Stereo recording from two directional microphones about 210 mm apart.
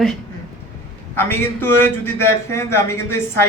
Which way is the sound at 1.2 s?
10° left (ahead or behind).